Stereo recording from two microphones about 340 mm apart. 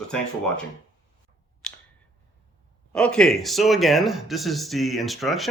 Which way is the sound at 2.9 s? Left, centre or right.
Centre.